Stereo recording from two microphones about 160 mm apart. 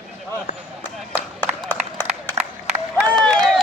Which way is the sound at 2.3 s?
40° right (ahead or behind).